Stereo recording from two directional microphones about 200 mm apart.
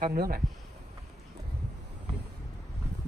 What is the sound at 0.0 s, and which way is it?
Speech, 50° right (ahead or behind).